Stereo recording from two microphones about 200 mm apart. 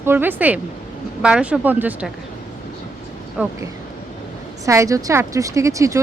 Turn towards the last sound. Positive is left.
turn(degrees=-15)  # may be behind; listen again after turning